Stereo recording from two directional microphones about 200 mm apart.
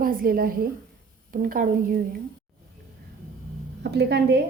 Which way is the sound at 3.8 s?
55° right (ahead or behind).